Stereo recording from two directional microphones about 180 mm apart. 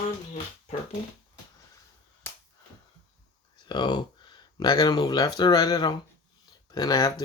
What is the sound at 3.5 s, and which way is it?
Speech, 25° left (ahead or behind).